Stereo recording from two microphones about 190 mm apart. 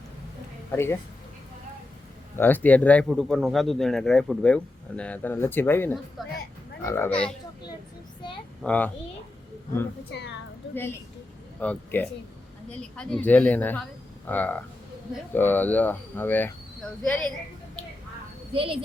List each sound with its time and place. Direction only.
0.7 s speech: 10° left (ahead or behind)
2.3 s speech: 10° left (ahead or behind)
8.6 s speech: 5° left (ahead or behind)
10.1 s speech: 65° left (ahead or behind)
10.8 s speech: 10° left (ahead or behind)
18.5 s a woman's voice: 30° right (ahead or behind)